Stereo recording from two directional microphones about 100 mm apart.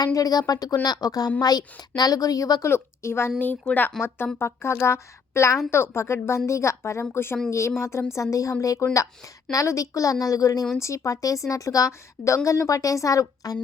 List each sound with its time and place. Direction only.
0.0 s a woman's voice: 40° left (ahead or behind)